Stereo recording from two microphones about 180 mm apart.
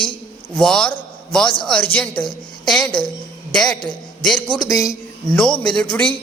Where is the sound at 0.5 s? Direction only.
5° left (ahead or behind).